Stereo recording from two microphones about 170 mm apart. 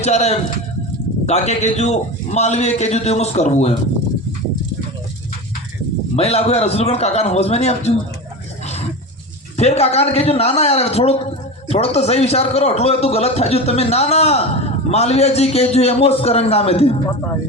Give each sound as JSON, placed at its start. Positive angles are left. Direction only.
{"t": 0.0, "sound": "a man's voice", "side_deg": 40}
{"t": 6.1, "sound": "a man's voice", "side_deg": 35}
{"t": 9.6, "sound": "a man's voice", "side_deg": 40}